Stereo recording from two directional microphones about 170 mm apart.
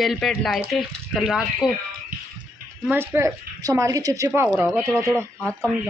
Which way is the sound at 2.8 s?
15° right (ahead or behind).